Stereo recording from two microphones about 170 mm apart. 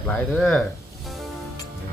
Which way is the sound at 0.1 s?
5° left (ahead or behind).